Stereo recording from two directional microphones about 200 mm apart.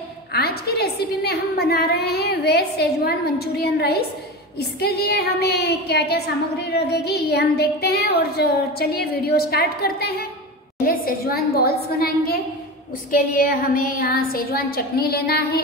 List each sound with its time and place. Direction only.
0.3 s a woman's voice: 55° left (ahead or behind)